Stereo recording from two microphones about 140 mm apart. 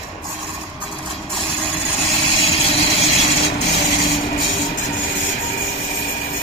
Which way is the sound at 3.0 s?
45° left (ahead or behind).